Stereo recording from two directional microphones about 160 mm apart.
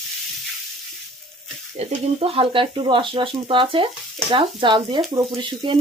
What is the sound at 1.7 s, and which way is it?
Speech, 35° right (ahead or behind).